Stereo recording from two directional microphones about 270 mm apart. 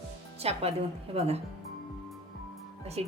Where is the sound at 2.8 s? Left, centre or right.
Right.